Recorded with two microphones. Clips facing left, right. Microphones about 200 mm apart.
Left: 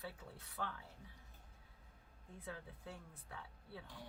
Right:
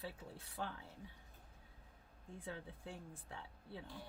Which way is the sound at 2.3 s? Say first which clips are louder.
Right 2 dB; 30° right (ahead or behind).